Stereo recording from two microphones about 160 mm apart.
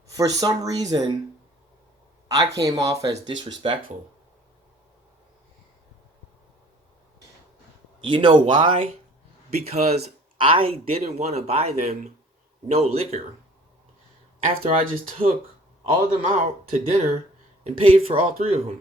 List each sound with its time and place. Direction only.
0.1 s speech: 20° right (ahead or behind)
2.2 s a sound: 25° right (ahead or behind)
2.6 s speech: 20° right (ahead or behind)
3.6 s speech: 35° right (ahead or behind)
8.0 s speech: 30° right (ahead or behind)
9.6 s speech: 45° right (ahead or behind)
14.5 s speech: 40° right (ahead or behind)
16.4 s speech: 45° right (ahead or behind)